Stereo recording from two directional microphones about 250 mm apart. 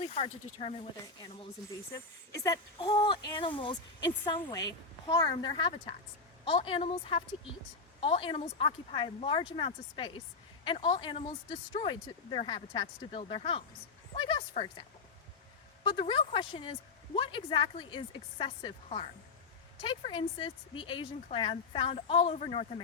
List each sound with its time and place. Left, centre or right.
0.0 s speech: left
2.4 s speech: centre